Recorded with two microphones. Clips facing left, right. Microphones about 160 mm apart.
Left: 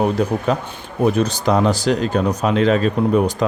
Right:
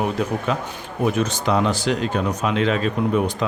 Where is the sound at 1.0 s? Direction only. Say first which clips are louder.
Left 4 dB; 35° left (ahead or behind).